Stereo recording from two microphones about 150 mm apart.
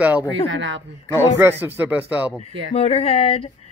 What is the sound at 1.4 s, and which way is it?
Speech, 15° right (ahead or behind).